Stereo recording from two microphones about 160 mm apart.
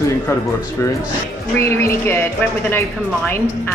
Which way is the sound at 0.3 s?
15° left (ahead or behind).